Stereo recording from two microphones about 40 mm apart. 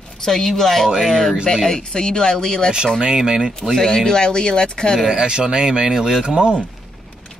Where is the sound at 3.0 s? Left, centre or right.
Centre.